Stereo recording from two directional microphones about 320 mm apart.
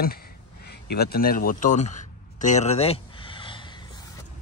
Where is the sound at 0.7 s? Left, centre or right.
Left.